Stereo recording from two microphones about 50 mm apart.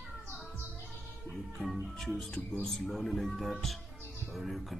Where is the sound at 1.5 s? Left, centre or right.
Centre.